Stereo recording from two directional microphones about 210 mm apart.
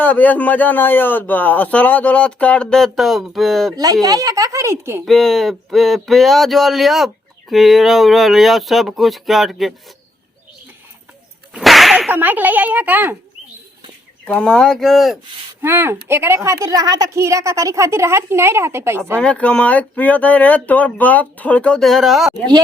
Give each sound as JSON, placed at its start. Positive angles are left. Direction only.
{"t": 0.0, "sound": "speech", "side_deg": 10}
{"t": 4.0, "sound": "a woman's voice", "side_deg": -15}
{"t": 5.0, "sound": "speech", "side_deg": 0}
{"t": 11.5, "sound": "a woman's voice", "side_deg": 0}
{"t": 14.3, "sound": "speech", "side_deg": 5}
{"t": 15.6, "sound": "a woman's voice", "side_deg": -10}
{"t": 19.1, "sound": "speech", "side_deg": 5}